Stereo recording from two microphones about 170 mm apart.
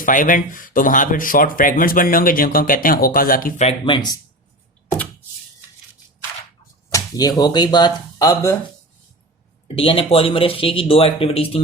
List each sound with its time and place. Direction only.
0.0 s speech: 50° left (ahead or behind)
3.6 s speech: 35° left (ahead or behind)
6.9 s speech: 20° left (ahead or behind)
9.6 s speech: 35° left (ahead or behind)